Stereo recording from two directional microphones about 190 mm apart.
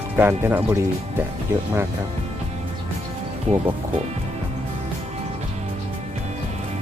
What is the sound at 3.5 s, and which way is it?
Speech, 35° right (ahead or behind).